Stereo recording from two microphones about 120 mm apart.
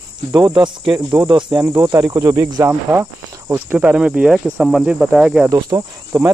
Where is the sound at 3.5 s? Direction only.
15° right (ahead or behind).